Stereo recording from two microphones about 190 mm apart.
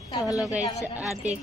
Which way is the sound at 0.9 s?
5° right (ahead or behind).